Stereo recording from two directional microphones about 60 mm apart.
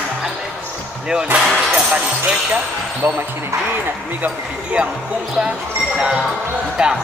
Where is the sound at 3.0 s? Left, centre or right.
Right.